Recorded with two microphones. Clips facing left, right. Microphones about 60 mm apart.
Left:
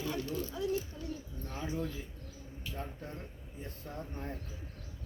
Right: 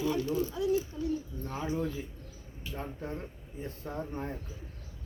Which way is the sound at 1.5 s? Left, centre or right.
Right.